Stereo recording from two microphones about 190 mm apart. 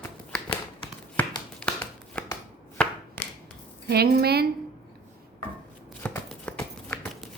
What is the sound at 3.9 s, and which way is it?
Speech, 55° right (ahead or behind).